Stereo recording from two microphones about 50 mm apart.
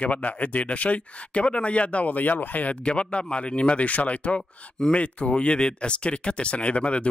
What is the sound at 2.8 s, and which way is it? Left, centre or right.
Speech, left.